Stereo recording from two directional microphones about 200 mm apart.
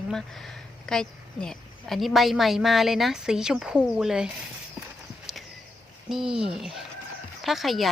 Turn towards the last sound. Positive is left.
turn(degrees=0)  # may be behind; listen again after turning